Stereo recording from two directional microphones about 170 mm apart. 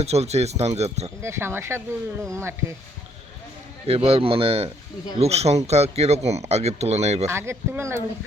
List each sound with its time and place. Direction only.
0.0 s speech: 40° right (ahead or behind)
1.2 s speech: 15° right (ahead or behind)
3.8 s speech: 35° right (ahead or behind)
7.3 s speech: 15° right (ahead or behind)